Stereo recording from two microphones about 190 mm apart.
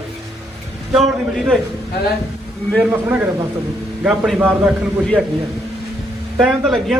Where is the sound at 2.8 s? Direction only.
10° right (ahead or behind).